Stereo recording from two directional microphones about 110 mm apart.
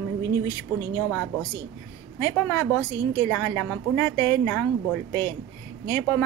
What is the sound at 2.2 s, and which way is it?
Speech, 20° left (ahead or behind).